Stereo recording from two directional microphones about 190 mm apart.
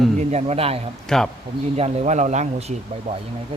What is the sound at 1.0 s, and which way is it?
Speech, 5° left (ahead or behind).